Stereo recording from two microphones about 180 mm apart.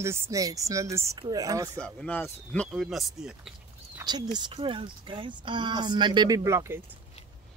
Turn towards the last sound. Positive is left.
turn(degrees=-15)  # may be behind; listen again after turning